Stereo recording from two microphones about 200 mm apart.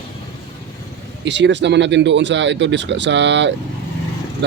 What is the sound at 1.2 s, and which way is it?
Speech, 60° right (ahead or behind).